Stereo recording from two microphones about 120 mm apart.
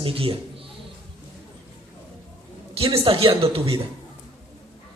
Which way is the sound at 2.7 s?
50° right (ahead or behind).